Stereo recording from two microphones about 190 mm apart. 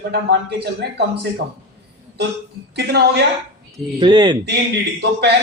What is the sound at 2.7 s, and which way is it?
Speech, 60° right (ahead or behind).